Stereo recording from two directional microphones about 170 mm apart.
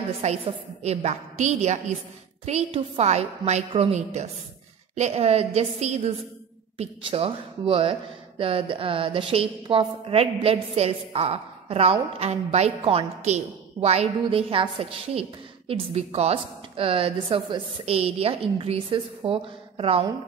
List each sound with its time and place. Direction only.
0.2 s a woman's voice: 40° right (ahead or behind)